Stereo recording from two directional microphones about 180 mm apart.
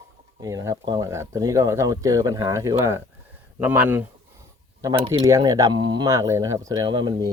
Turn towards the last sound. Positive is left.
turn(degrees=-25)  # may be behind; listen again after turning